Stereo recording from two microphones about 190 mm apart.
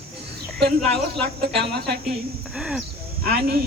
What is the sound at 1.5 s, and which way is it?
Speech, 60° right (ahead or behind).